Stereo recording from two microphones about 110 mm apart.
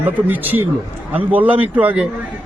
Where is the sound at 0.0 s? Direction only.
15° right (ahead or behind).